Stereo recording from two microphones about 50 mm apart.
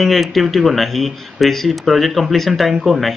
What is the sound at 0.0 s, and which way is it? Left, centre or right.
Speech, centre.